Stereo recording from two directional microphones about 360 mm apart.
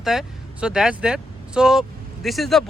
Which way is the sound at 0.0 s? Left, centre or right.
Centre.